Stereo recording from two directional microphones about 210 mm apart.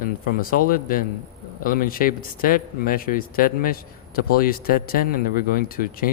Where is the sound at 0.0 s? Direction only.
40° left (ahead or behind).